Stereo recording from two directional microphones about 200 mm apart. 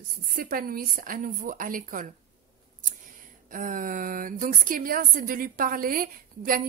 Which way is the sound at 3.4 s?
40° right (ahead or behind).